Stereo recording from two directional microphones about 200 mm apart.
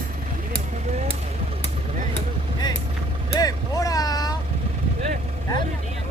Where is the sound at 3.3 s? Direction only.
20° left (ahead or behind).